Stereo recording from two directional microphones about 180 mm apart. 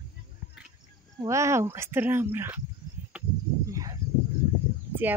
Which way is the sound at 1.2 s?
15° right (ahead or behind).